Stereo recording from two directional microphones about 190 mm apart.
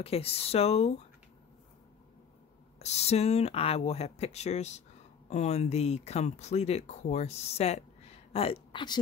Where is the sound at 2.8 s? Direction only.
35° left (ahead or behind).